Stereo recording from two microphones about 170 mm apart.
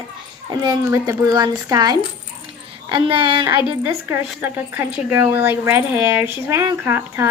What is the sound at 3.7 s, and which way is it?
Speech, 15° right (ahead or behind).